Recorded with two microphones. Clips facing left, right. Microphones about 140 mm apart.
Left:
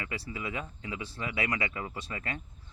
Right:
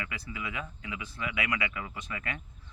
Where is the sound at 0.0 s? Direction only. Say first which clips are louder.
Left 2 dB; 30° left (ahead or behind).